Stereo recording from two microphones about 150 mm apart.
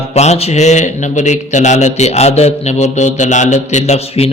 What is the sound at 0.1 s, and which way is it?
A man's voice, 45° left (ahead or behind).